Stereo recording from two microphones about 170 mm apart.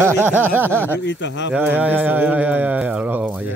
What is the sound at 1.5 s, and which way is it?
Speech, 10° right (ahead or behind).